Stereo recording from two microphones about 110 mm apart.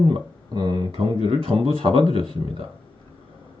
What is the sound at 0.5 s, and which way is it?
Speech, 40° right (ahead or behind).